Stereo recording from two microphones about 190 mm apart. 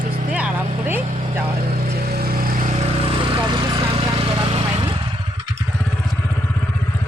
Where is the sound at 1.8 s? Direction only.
55° right (ahead or behind).